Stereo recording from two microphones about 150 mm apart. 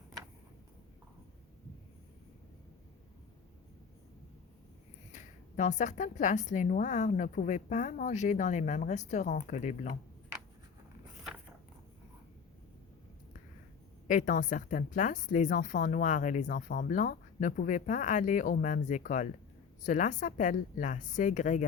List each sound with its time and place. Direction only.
5.1 s a woman's voice: 55° left (ahead or behind)
14.1 s a woman's voice: 60° left (ahead or behind)